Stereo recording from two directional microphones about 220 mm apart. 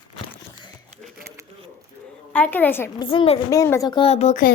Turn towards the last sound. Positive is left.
turn(degrees=35)  # may be behind; listen again after turning